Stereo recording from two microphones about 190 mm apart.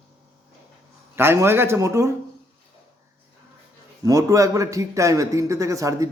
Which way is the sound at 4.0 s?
15° right (ahead or behind).